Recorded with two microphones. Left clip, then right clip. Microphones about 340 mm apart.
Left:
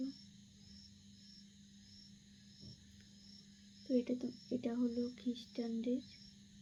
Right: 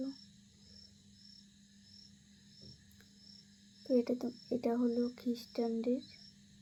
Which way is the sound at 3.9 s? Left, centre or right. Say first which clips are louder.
Right 5 dB; centre.